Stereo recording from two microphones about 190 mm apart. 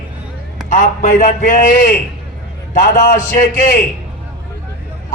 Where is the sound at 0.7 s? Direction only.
40° left (ahead or behind).